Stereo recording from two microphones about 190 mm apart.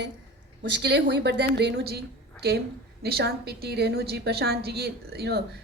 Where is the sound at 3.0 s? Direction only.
55° right (ahead or behind).